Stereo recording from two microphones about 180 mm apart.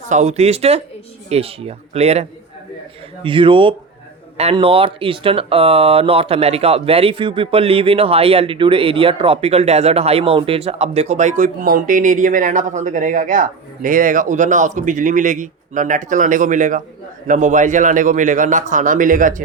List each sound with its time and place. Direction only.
0.1 s speech: 40° right (ahead or behind)
3.2 s a man's voice: 30° right (ahead or behind); by 19.4 s 45° right (ahead or behind)